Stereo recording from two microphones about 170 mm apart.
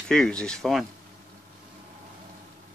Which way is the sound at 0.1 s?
5° left (ahead or behind).